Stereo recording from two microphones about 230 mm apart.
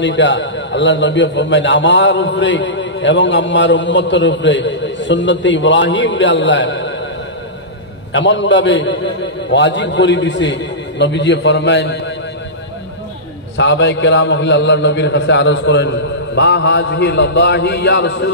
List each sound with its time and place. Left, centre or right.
0.0 s a man's voice: left
8.1 s a man's voice: left
13.6 s a man's voice: left